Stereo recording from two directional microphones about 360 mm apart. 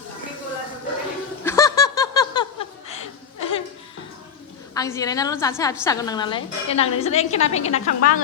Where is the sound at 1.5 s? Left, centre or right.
Centre.